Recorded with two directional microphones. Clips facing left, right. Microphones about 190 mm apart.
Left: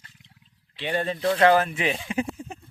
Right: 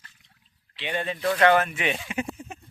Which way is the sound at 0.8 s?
35° left (ahead or behind).